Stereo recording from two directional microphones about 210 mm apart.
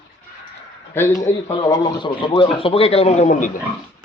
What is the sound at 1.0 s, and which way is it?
A man's voice, 15° left (ahead or behind).